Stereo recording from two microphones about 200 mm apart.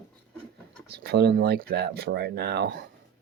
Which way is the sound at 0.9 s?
55° right (ahead or behind).